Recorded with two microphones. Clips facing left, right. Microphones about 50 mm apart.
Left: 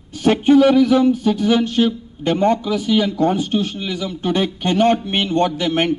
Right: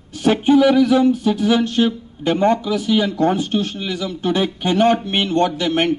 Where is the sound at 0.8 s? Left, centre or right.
Left.